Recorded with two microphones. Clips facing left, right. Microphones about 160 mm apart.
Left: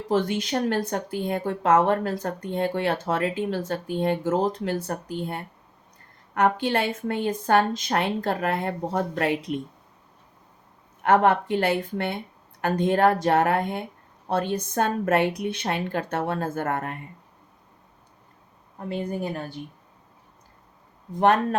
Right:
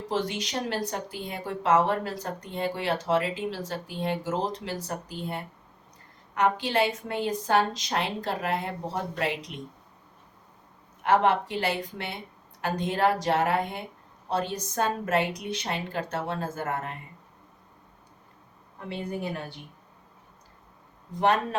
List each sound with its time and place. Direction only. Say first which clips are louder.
0.1 s a woman's voice: left 6 dB; 50° left (ahead or behind)
11.0 s a woman's voice: left 3 dB; 55° left (ahead or behind)
18.8 s speech: left 4 dB; 45° left (ahead or behind)
21.2 s speech: left 4 dB; 55° left (ahead or behind)